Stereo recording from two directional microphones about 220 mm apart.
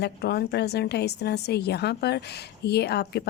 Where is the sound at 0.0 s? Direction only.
45° left (ahead or behind).